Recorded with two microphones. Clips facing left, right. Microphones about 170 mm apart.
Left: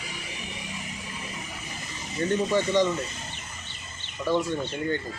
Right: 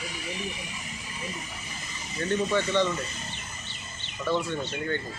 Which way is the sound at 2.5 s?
10° left (ahead or behind).